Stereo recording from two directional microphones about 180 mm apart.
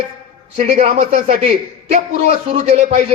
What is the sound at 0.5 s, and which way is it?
Speech, 35° right (ahead or behind).